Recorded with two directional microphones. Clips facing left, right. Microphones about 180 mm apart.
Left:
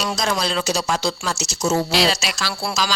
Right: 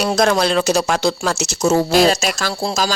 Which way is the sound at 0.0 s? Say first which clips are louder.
Right 7 dB; 60° right (ahead or behind).